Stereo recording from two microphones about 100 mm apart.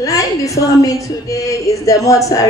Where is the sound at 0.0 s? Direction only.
35° left (ahead or behind).